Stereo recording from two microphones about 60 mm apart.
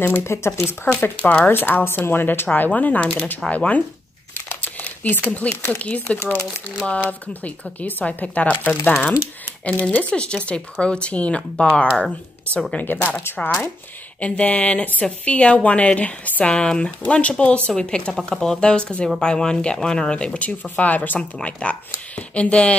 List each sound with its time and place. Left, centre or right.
0.0 s speech: left
4.3 s crumpling: left
5.8 s speech: left
13.4 s speech: centre
21.2 s speech: centre